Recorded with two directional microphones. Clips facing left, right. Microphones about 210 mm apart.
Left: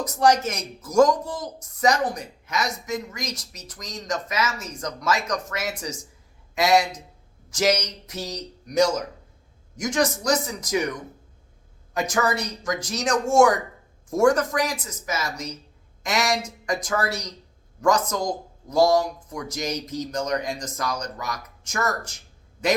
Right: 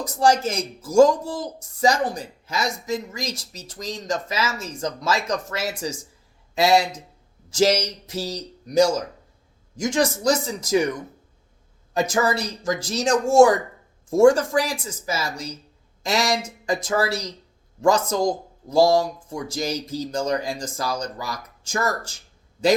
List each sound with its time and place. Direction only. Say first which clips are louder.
0.0 s a man's voice: even; 30° right (ahead or behind)
11.9 s speech: right 2 dB; 30° right (ahead or behind)